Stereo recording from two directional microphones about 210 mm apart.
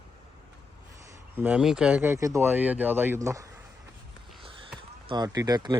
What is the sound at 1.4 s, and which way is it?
Speech, 5° right (ahead or behind).